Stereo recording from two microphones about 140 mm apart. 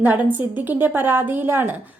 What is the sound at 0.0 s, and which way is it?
A woman's voice, 15° right (ahead or behind).